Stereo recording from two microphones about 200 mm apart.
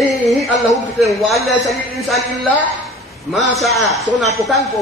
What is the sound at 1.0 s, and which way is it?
Speech, centre (ahead or behind).